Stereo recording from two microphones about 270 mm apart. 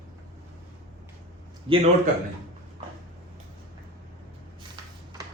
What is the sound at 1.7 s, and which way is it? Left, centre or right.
Speech, centre.